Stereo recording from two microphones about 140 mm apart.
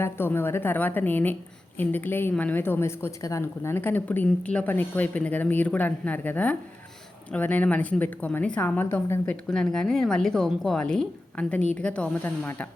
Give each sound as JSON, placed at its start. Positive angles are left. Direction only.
{"t": 0.0, "sound": "a woman's voice", "side_deg": 15}